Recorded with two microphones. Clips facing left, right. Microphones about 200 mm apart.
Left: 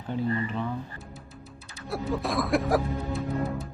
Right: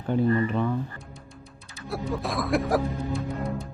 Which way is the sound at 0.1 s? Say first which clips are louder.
Right 6 dB; 55° right (ahead or behind).